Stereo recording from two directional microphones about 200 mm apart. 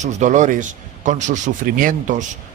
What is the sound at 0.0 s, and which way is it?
Speech, 35° right (ahead or behind).